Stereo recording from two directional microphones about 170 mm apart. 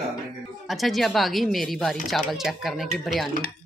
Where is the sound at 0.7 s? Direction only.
Centre (ahead or behind).